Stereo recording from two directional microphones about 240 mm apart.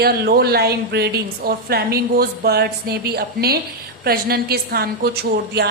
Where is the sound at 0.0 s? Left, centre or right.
Right.